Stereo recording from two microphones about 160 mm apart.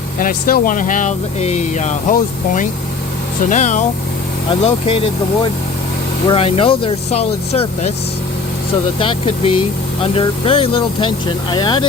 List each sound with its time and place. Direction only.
0.2 s speech: 60° left (ahead or behind)
4.4 s speech: 35° left (ahead or behind)
9.0 s speech: 35° left (ahead or behind)